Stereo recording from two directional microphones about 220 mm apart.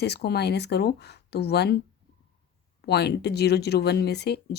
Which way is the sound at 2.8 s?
50° left (ahead or behind).